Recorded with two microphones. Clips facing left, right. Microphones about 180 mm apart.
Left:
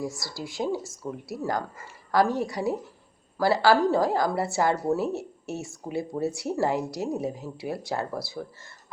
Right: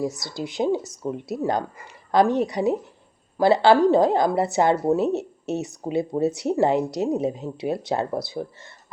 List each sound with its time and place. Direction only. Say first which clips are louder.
0.0 s speech: right 6 dB; 20° right (ahead or behind)